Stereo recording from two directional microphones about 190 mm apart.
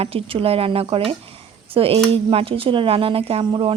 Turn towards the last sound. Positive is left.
turn(degrees=-30)  # may be behind; listen again after turning